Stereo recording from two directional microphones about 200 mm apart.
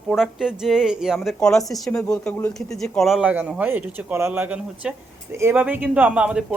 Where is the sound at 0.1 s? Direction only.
Centre (ahead or behind).